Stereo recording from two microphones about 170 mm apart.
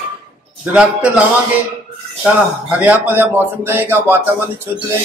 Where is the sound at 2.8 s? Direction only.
10° right (ahead or behind).